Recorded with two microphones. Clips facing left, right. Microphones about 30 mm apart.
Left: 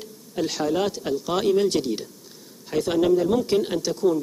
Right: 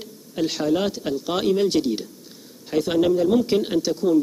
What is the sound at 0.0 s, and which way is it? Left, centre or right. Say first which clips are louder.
Speech: right 2 dB; centre.